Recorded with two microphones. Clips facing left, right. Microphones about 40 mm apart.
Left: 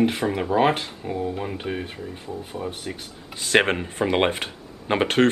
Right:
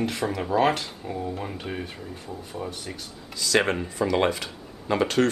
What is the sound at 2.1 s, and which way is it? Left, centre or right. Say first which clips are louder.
Speech: left 3 dB; left.